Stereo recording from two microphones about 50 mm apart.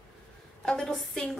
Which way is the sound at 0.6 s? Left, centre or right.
Centre.